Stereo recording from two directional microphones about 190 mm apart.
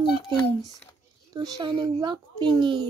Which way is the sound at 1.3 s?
20° right (ahead or behind).